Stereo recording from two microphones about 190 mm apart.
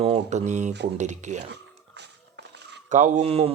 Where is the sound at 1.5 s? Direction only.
65° right (ahead or behind).